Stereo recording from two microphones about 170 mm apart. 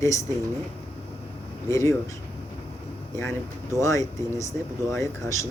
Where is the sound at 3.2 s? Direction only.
15° left (ahead or behind).